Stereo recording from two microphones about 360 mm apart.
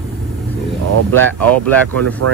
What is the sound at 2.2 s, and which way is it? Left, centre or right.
Speech, right.